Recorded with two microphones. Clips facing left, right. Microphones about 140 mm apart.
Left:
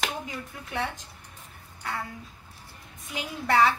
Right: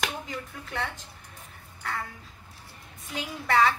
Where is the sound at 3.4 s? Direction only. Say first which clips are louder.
Left 1 dB; centre (ahead or behind).